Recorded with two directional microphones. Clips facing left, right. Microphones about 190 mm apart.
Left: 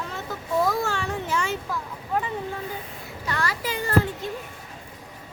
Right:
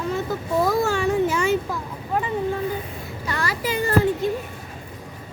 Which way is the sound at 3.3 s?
10° right (ahead or behind).